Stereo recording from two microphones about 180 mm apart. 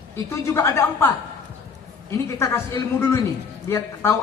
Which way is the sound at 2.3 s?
15° left (ahead or behind).